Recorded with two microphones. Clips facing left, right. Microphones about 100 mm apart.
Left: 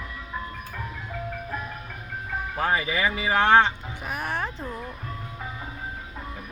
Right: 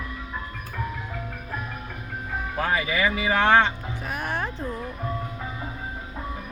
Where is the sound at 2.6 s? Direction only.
30° left (ahead or behind).